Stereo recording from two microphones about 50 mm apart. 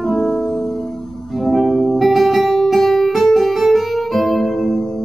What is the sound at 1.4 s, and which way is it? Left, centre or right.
Music, centre.